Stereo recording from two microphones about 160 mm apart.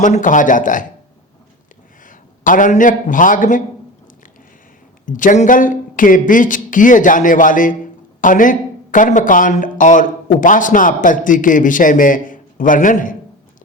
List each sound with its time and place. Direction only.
0.0 s speech: 50° left (ahead or behind)
2.0 s a man's voice: 55° left (ahead or behind)
5.0 s speech: 55° left (ahead or behind)